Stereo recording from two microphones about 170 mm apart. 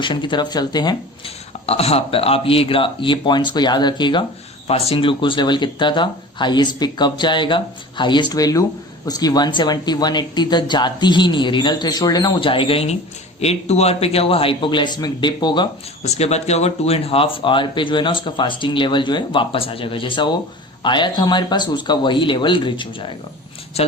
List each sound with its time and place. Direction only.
0.0 s speech: 30° left (ahead or behind)
1.6 s speech: 35° left (ahead or behind)
16.0 s speech: 40° left (ahead or behind)